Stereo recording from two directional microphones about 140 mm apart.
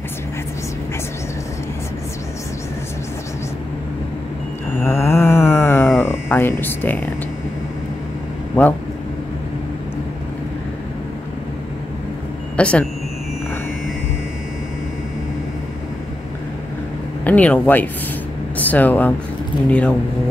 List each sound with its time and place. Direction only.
4.8 s a sound: 15° left (ahead or behind)
8.6 s a man's voice: 15° left (ahead or behind)
12.5 s speech: 10° left (ahead or behind)
17.2 s a man's voice: 10° left (ahead or behind)